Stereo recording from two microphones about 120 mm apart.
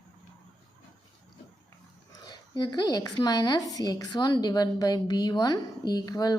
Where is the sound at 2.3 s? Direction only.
35° left (ahead or behind).